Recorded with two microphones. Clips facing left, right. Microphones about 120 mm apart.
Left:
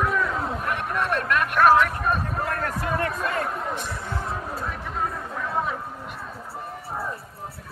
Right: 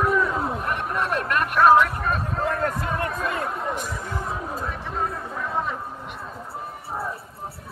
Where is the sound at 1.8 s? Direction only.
Centre (ahead or behind).